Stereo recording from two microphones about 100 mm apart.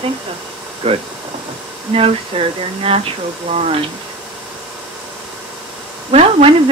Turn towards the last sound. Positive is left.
turn(degrees=-80)